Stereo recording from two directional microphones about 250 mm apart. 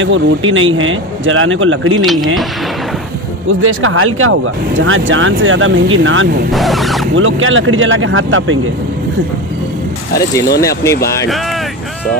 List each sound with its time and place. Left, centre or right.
0.0 s speech: right
2.0 s speech: centre
3.6 s speech: right
6.5 s speech: centre
7.2 s speech: right
10.6 s speech: centre